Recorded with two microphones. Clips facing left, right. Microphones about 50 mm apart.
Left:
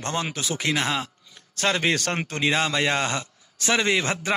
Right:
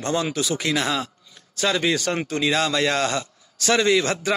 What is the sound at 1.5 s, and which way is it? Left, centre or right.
A man's voice, left.